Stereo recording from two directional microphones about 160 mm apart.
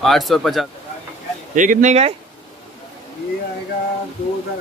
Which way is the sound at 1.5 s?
50° right (ahead or behind).